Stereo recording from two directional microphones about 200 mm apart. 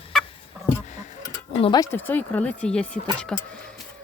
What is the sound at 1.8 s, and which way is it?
Speech, 10° left (ahead or behind).